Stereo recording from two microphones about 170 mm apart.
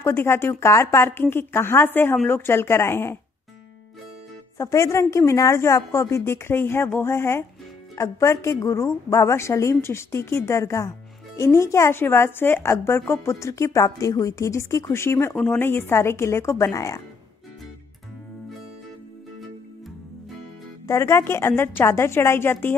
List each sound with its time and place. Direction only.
0.0 s speech: 15° left (ahead or behind)
4.6 s speech: 15° left (ahead or behind)
20.8 s speech: 15° left (ahead or behind)